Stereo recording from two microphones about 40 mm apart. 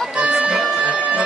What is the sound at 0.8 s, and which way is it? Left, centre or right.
Music, right.